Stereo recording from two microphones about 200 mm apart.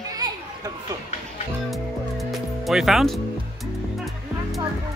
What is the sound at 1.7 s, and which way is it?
Music, centre (ahead or behind).